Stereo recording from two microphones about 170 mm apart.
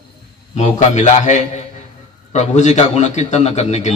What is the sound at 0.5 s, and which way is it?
A man's voice, 45° left (ahead or behind).